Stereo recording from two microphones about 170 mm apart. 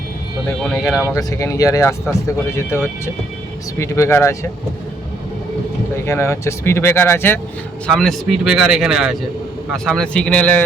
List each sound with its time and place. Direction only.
0.8 s speech: 15° left (ahead or behind)
6.1 s speech: 15° left (ahead or behind)